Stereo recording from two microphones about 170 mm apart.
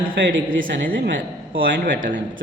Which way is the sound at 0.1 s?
55° right (ahead or behind).